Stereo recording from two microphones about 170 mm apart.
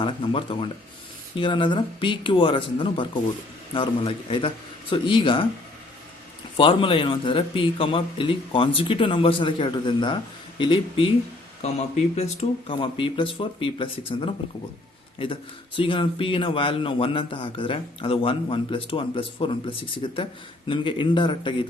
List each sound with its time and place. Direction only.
0.0 s a man's voice: 30° left (ahead or behind)
6.6 s a man's voice: 30° left (ahead or behind)
12.1 s a man's voice: 40° left (ahead or behind)